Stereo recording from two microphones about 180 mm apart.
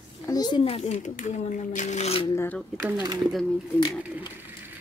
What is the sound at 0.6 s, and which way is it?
Speech, 35° left (ahead or behind).